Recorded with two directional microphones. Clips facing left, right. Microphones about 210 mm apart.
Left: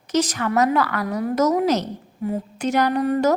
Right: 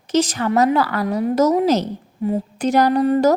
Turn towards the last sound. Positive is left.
turn(degrees=-30)  # may be behind; listen again after turning